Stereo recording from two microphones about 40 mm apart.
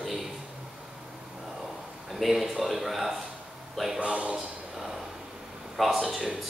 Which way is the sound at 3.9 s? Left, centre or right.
Right.